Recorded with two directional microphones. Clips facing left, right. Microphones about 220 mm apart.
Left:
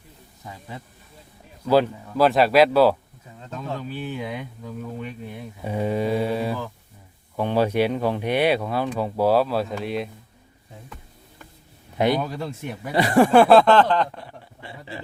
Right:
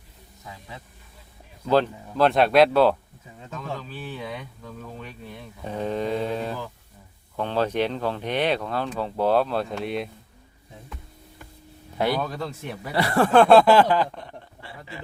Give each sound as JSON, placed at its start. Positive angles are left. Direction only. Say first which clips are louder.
{"t": 1.6, "sound": "speech", "louder": "left 2 dB", "side_deg": 5}
{"t": 3.9, "sound": "speech", "louder": "left 4 dB", "side_deg": 15}
{"t": 11.9, "sound": "speech", "louder": "left 3 dB", "side_deg": 20}
{"t": 14.1, "sound": "speech", "louder": "even", "side_deg": 5}
{"t": 14.6, "sound": "a sound", "louder": "left 5 dB", "side_deg": 25}